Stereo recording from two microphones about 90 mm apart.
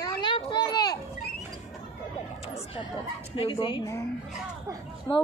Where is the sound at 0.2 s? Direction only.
55° left (ahead or behind).